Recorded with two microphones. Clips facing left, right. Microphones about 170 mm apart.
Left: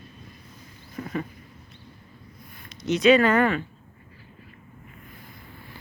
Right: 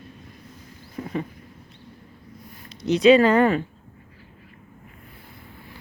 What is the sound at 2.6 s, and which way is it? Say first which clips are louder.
Speech: right 3 dB; 30° right (ahead or behind).